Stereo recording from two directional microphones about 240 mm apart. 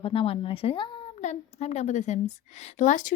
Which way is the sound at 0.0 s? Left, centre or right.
Left.